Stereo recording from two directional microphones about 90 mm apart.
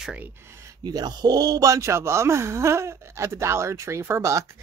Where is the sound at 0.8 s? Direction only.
50° right (ahead or behind).